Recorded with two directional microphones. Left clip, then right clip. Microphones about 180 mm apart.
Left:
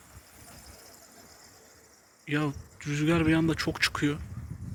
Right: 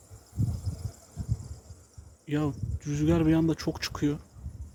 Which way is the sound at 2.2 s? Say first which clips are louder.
Even; 15° right (ahead or behind).